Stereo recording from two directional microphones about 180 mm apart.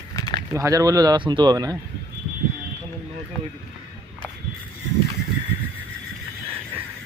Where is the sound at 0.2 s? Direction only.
25° left (ahead or behind).